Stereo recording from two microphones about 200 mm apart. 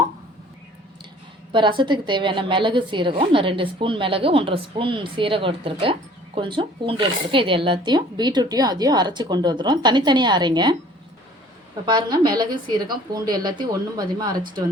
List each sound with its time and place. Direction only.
1.5 s a woman's voice: 25° right (ahead or behind)
11.9 s a woman's voice: 20° right (ahead or behind)